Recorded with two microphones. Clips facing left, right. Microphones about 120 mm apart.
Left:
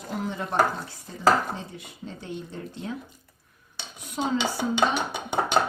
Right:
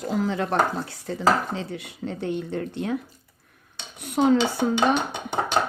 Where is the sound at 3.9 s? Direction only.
65° right (ahead or behind).